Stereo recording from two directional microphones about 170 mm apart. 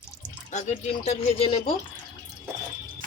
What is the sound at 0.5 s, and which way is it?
Speech, 40° left (ahead or behind).